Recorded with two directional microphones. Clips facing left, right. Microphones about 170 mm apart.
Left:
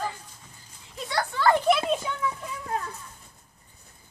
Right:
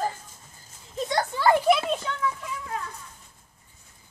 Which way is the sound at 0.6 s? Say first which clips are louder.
Right 7 dB; 45° right (ahead or behind).